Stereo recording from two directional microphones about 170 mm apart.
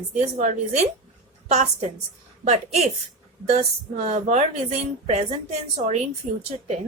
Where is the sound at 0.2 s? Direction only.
40° right (ahead or behind).